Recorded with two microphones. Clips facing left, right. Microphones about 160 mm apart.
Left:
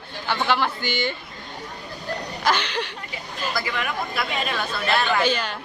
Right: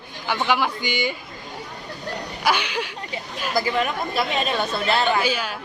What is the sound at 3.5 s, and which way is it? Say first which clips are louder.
A woman's voice: right 7 dB; 30° right (ahead or behind).